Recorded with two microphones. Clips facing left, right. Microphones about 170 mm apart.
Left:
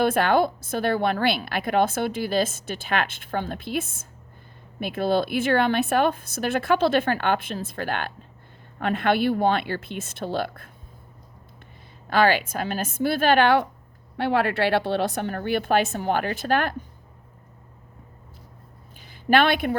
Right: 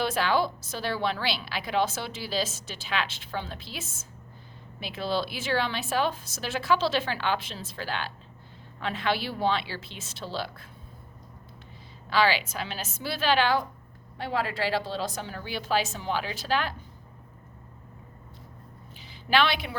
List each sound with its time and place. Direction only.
0.0 s a woman's voice: 55° left (ahead or behind)
12.0 s a woman's voice: 50° left (ahead or behind)
18.9 s a sound: 50° left (ahead or behind)